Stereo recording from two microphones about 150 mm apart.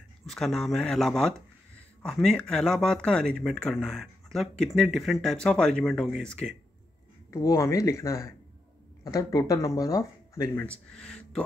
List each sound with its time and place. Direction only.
0.3 s speech: centre (ahead or behind)
7.2 s speech: 20° left (ahead or behind)